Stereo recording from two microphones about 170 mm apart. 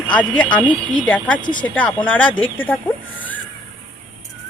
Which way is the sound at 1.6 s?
10° left (ahead or behind).